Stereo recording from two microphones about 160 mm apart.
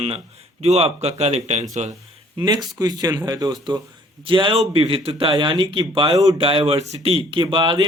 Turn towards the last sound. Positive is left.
turn(degrees=-30)  # may be behind; listen again after turning